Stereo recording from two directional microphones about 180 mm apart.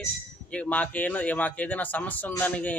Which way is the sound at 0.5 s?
5° left (ahead or behind).